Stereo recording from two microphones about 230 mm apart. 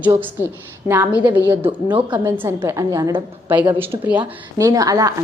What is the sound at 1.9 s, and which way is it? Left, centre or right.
A woman's voice, centre.